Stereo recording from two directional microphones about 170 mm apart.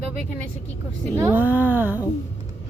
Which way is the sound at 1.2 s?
10° right (ahead or behind).